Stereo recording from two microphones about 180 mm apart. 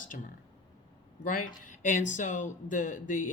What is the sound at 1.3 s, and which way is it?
Speech, 45° left (ahead or behind).